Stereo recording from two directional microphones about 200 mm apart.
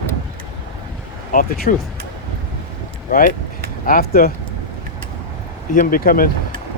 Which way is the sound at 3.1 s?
50° left (ahead or behind).